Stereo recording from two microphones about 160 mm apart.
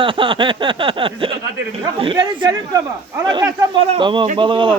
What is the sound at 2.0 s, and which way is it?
Speech, 30° right (ahead or behind).